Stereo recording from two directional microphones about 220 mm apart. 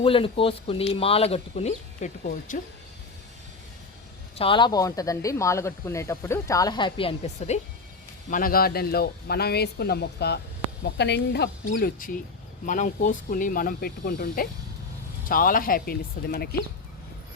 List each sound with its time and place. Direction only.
0.0 s speech: 25° left (ahead or behind)
4.4 s speech: 20° left (ahead or behind); by 16.6 s 45° left (ahead or behind)